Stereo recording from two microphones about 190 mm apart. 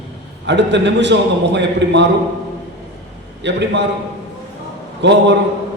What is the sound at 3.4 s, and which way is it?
Speech, 65° right (ahead or behind).